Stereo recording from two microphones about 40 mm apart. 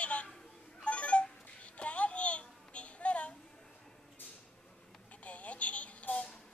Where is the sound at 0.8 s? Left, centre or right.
Left.